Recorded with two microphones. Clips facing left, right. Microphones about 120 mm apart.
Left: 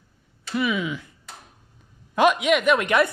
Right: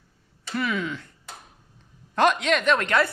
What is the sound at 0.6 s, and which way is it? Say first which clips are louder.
Speech: left 3 dB; 10° left (ahead or behind).